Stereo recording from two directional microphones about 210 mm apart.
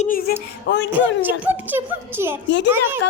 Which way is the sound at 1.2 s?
10° right (ahead or behind).